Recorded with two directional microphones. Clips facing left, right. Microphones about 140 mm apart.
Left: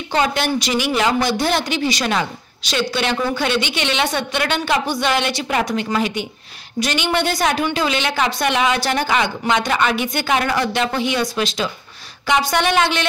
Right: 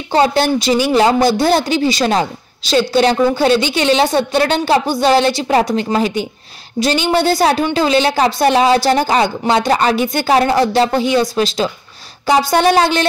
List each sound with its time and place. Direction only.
0.1 s speech: 35° right (ahead or behind)